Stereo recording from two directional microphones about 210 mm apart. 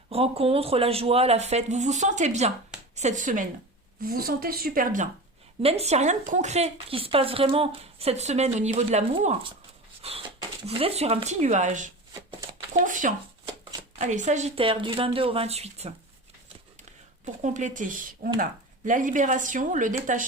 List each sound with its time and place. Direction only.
0.1 s a woman's voice: 30° right (ahead or behind)
17.4 s speech: 35° right (ahead or behind)